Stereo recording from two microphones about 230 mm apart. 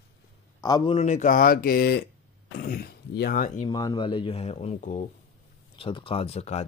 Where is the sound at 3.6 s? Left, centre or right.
Centre; by 5.0 s left.